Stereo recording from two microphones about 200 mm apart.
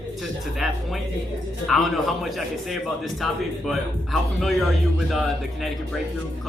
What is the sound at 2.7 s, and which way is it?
A man's voice, centre (ahead or behind).